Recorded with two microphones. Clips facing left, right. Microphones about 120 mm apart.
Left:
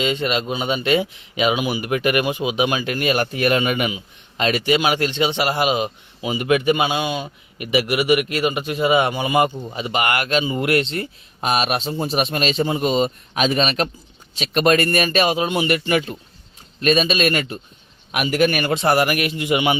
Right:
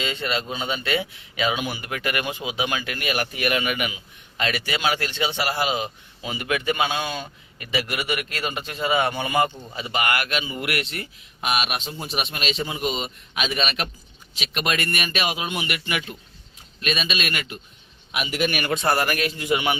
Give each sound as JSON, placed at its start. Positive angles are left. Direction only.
{"t": 0.0, "sound": "speech", "side_deg": 20}
{"t": 18.1, "sound": "a man's voice", "side_deg": 50}
{"t": 18.6, "sound": "speech", "side_deg": 25}